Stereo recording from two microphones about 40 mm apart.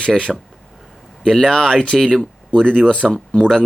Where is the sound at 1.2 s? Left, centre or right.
Centre.